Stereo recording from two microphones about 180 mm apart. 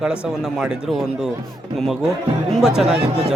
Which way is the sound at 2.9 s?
30° right (ahead or behind).